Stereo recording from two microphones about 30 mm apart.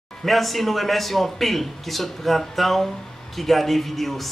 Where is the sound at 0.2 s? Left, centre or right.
Centre.